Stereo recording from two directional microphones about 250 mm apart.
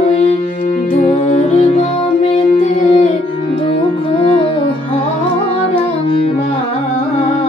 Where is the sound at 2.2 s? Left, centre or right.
Left.